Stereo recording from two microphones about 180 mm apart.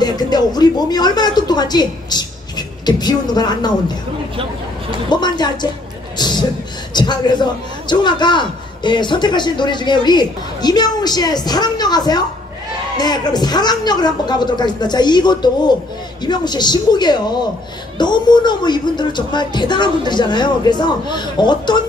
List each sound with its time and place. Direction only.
0.0 s a man's voice: 25° left (ahead or behind)
5.1 s a man's voice: 25° left (ahead or behind)
6.1 s a sound: 25° left (ahead or behind)
6.9 s a man's voice: 25° left (ahead or behind)